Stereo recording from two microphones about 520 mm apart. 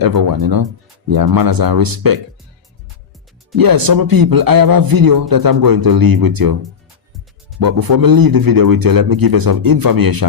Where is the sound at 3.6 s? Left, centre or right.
Right.